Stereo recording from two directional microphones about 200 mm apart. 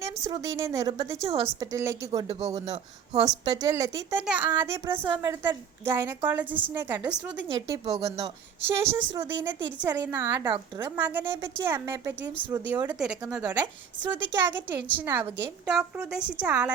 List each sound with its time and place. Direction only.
0.0 s a woman's voice: 15° right (ahead or behind)
7.4 s a woman's voice: 20° right (ahead or behind)
10.9 s a woman's voice: 10° right (ahead or behind)